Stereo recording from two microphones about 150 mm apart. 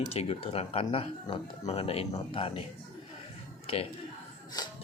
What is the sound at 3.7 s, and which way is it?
Speech, 40° left (ahead or behind).